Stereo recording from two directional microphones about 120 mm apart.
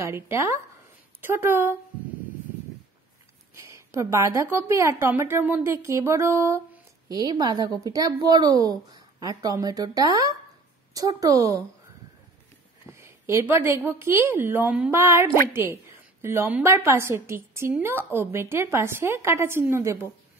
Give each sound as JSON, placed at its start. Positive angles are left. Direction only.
{"t": 0.0, "sound": "a woman's voice", "side_deg": -20}
{"t": 3.5, "sound": "a woman's voice", "side_deg": -25}
{"t": 7.2, "sound": "a woman's voice", "side_deg": -35}
{"t": 12.8, "sound": "a woman's voice", "side_deg": -20}